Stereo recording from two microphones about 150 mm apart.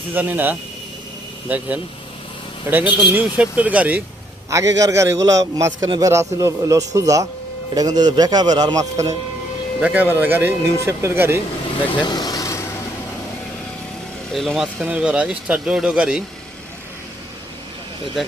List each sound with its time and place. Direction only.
0.1 s speech: 10° right (ahead or behind)
4.4 s a man's voice: 20° right (ahead or behind)
9.8 s speech: 10° right (ahead or behind)
11.9 s vehicle: 30° left (ahead or behind)
14.3 s speech: centre (ahead or behind)